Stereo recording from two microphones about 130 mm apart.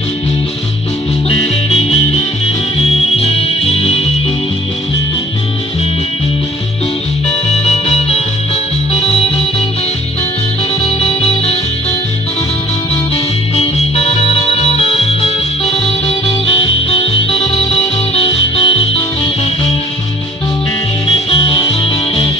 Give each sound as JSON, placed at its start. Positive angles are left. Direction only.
{"t": 1.3, "sound": "music", "side_deg": 45}
{"t": 7.4, "sound": "music", "side_deg": 55}
{"t": 10.8, "sound": "music", "side_deg": 50}
{"t": 13.1, "sound": "music", "side_deg": 50}
{"t": 21.3, "sound": "music", "side_deg": 45}